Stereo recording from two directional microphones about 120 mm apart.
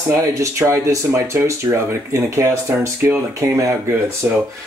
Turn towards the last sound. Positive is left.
turn(degrees=-25)  # may be behind; listen again after turning